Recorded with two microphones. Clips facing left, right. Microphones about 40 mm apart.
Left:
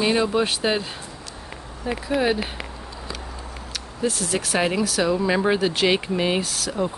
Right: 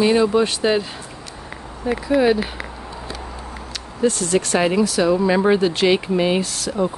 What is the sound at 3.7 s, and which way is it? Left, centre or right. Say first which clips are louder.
Speech: right 5 dB; centre.